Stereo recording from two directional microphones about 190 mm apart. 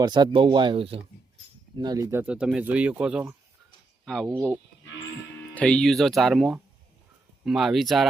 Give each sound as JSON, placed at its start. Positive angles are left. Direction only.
{"t": 0.0, "sound": "speech", "side_deg": -25}
{"t": 5.5, "sound": "speech", "side_deg": 5}